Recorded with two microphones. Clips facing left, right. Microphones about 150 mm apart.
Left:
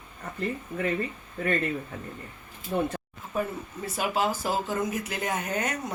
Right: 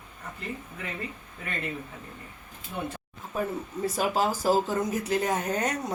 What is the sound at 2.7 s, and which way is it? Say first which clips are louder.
Speech: left 7 dB; 50° left (ahead or behind).